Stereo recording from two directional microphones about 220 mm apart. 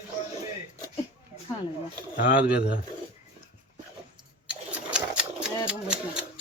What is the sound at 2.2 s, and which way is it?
Speech, 50° left (ahead or behind).